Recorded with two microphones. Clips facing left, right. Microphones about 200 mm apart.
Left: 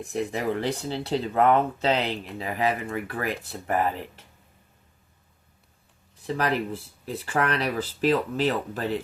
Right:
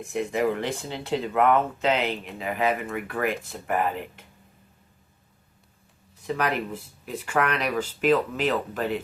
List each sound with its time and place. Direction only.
0.0 s speech: 35° left (ahead or behind)
6.2 s speech: 35° left (ahead or behind)